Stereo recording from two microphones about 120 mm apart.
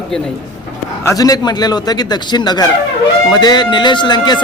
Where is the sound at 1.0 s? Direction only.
25° left (ahead or behind).